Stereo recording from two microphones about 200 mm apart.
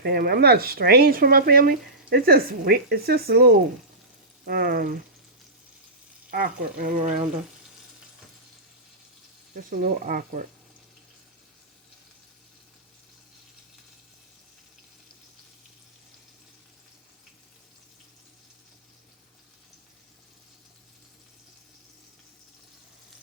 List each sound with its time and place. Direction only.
0.0 s speech: 50° right (ahead or behind)
6.3 s speech: 45° right (ahead or behind)
9.6 s speech: 45° right (ahead or behind)